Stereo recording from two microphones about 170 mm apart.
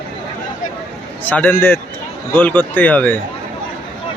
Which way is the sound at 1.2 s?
10° left (ahead or behind).